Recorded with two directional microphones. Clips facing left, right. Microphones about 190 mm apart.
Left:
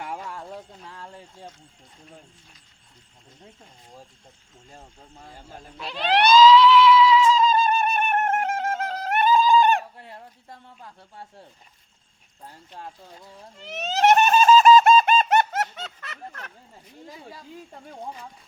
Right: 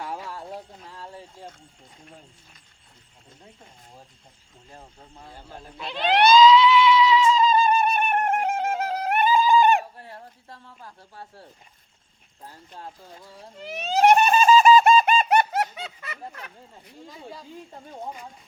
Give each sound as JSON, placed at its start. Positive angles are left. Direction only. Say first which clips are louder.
{"t": 5.7, "sound": "music", "louder": "even", "side_deg": 0}
{"t": 10.0, "sound": "dog", "louder": "right 1 dB", "side_deg": 20}
{"t": 13.6, "sound": "speech", "louder": "right 2 dB", "side_deg": 0}
{"t": 14.2, "sound": "a sound", "louder": "left 1 dB", "side_deg": 0}
{"t": 14.6, "sound": "bird", "louder": "left 1 dB", "side_deg": -5}